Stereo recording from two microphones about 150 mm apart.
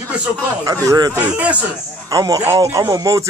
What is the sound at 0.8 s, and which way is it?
Speech, 25° right (ahead or behind).